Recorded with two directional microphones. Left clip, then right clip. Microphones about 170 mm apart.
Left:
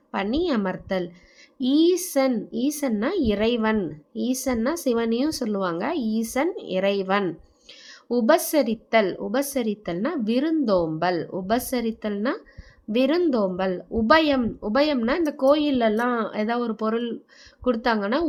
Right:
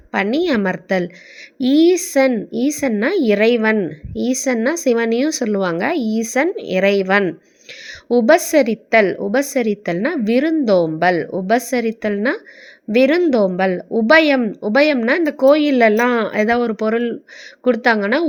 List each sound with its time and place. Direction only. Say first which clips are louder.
0.1 s a woman's voice: right 7 dB; 30° right (ahead or behind)